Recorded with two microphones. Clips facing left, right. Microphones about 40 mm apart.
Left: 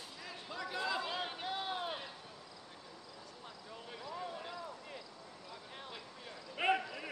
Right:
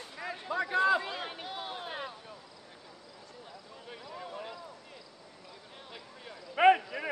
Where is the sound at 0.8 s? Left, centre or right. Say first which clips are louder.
Right 10 dB; right.